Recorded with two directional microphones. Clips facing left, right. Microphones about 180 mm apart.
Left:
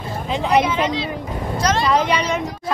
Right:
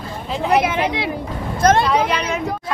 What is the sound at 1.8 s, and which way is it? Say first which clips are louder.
Speech: even; centre (ahead or behind).